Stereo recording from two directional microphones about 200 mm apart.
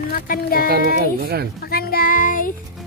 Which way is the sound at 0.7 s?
50° right (ahead or behind).